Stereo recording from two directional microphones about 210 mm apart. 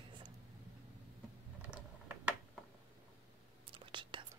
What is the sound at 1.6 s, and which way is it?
Typing, 5° right (ahead or behind).